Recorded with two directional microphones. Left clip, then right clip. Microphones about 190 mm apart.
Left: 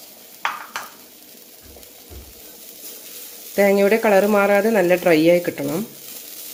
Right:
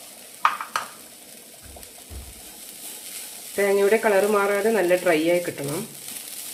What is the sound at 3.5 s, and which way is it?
Speech, 45° left (ahead or behind).